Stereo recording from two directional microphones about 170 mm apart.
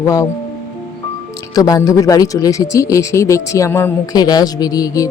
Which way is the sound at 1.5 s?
20° left (ahead or behind).